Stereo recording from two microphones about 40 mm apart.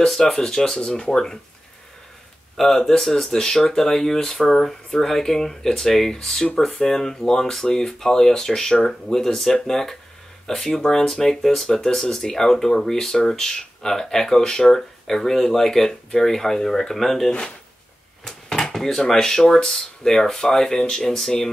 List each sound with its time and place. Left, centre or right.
0.2 s speech: centre
2.5 s speech: centre